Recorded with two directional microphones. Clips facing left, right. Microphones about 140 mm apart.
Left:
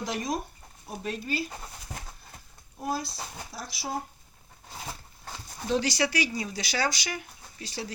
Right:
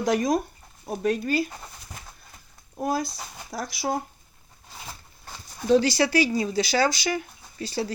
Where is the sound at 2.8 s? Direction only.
50° right (ahead or behind).